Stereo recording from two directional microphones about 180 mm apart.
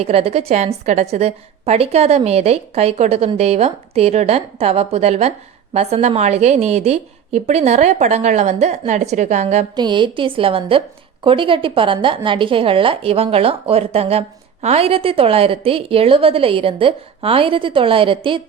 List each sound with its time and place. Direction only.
0.0 s a woman's voice: 35° right (ahead or behind)
9.7 s a woman's voice: 25° right (ahead or behind)